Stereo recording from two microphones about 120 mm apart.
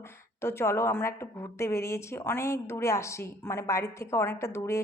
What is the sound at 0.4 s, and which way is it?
A woman's voice, 20° left (ahead or behind).